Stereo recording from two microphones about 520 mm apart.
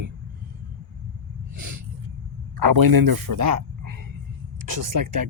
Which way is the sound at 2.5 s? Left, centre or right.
Right.